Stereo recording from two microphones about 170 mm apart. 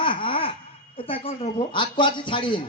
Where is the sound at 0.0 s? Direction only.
30° left (ahead or behind).